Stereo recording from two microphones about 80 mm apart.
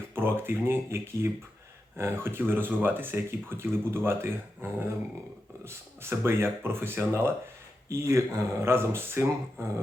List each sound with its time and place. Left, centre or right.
0.1 s speech: right